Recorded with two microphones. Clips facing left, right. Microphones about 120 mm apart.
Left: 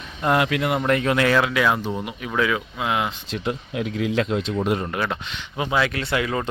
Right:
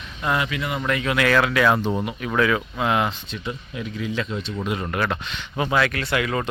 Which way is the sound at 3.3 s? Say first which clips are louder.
Left 5 dB; 65° left (ahead or behind).